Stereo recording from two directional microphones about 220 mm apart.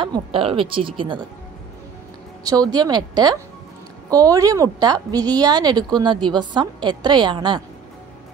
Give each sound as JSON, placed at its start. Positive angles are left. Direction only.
{"t": 0.0, "sound": "a woman's voice", "side_deg": -25}
{"t": 2.4, "sound": "a woman's voice", "side_deg": -15}